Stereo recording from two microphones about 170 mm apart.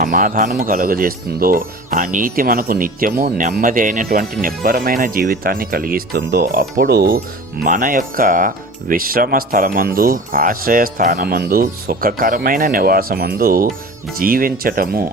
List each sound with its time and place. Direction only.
0.0 s speech: 50° right (ahead or behind)
7.6 s speech: 50° right (ahead or behind)